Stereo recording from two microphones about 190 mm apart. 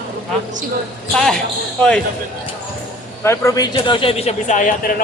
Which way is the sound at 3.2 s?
15° left (ahead or behind).